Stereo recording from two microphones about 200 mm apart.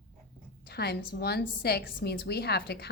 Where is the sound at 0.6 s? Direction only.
55° left (ahead or behind).